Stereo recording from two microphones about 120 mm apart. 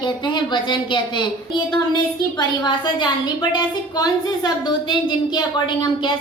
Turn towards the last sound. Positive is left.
turn(degrees=35)  # may be behind; listen again after turning